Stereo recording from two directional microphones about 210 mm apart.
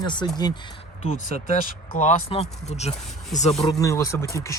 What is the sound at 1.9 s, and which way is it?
Speech, 30° left (ahead or behind).